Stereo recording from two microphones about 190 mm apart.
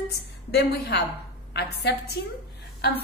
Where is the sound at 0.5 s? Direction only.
60° left (ahead or behind).